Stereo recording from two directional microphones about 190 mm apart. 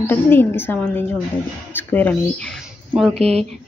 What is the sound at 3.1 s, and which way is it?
Speech, 35° right (ahead or behind).